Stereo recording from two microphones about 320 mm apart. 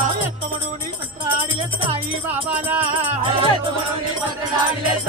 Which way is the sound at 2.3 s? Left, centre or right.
Centre.